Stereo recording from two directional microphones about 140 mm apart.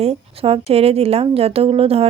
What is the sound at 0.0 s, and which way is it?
A woman's voice, 45° right (ahead or behind).